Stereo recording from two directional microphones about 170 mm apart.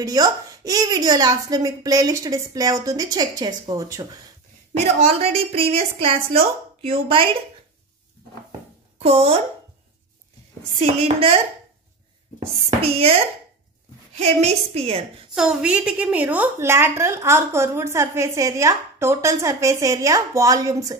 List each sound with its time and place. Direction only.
0.0 s speech: 20° right (ahead or behind)
5.0 s a woman's voice: 35° right (ahead or behind)
10.8 s a woman's voice: 35° right (ahead or behind)
12.6 s a woman's voice: 35° right (ahead or behind)
15.3 s a woman's voice: 5° right (ahead or behind); by 21.0 s 20° right (ahead or behind)